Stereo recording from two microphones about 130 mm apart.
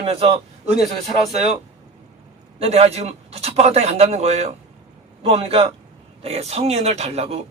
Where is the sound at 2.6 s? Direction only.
50° right (ahead or behind).